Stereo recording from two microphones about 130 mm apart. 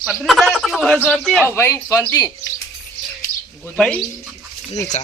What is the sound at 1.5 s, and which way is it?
Speech, 20° left (ahead or behind).